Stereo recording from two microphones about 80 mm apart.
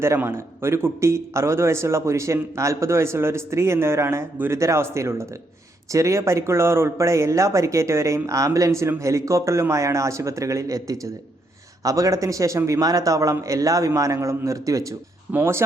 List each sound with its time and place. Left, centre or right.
0.2 s speech: right
15.3 s speech: right